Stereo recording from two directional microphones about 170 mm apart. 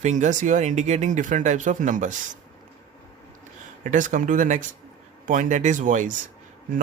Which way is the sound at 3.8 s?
50° right (ahead or behind).